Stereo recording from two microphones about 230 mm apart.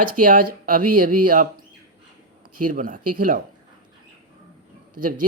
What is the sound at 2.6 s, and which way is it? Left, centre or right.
Speech, right.